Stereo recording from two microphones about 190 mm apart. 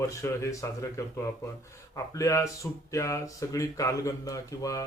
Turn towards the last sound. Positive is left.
turn(degrees=20)  # may be behind; listen again after turning